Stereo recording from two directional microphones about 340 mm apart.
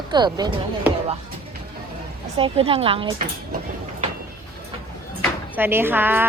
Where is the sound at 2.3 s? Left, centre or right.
Centre.